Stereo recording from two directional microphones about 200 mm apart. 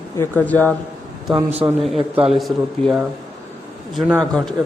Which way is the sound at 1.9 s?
30° right (ahead or behind).